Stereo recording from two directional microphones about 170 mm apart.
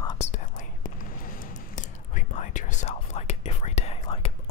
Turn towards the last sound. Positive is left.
turn(degrees=35)  # may be behind; listen again after turning